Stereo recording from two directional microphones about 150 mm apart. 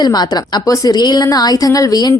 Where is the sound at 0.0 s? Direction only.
25° left (ahead or behind).